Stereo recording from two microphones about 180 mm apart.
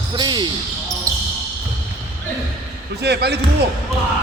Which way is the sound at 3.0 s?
65° right (ahead or behind).